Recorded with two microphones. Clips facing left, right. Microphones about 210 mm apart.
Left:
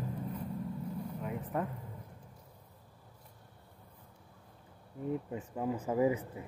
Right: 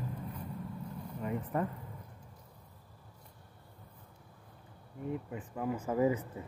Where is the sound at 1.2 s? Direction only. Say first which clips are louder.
Right 4 dB; centre (ahead or behind).